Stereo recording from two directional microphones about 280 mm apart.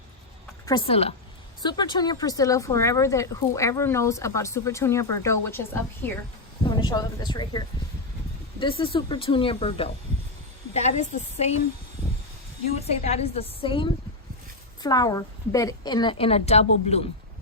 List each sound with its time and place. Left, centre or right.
0.6 s a woman's voice: centre
8.8 s speech: centre
12.8 s speech: left